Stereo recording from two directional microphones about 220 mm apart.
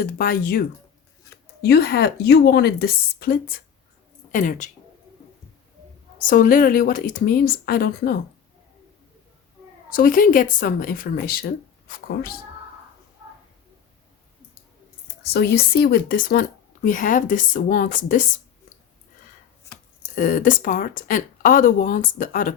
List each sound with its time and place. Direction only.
0.0 s a woman's voice: 40° left (ahead or behind)
1.6 s a woman's voice: 45° left (ahead or behind)
6.1 s a woman's voice: 40° left (ahead or behind)
9.9 s a woman's voice: 40° left (ahead or behind)
15.2 s a woman's voice: 45° left (ahead or behind)
19.7 s a sound: 15° left (ahead or behind)
20.1 s a woman's voice: 35° left (ahead or behind)